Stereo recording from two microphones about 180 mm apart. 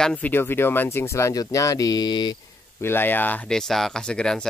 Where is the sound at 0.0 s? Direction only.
5° left (ahead or behind); by 2.3 s 25° left (ahead or behind).